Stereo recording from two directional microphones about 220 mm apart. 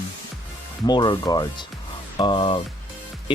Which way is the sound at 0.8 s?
20° left (ahead or behind).